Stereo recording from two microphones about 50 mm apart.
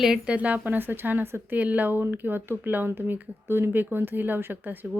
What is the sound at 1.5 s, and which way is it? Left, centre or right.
A woman's voice, right.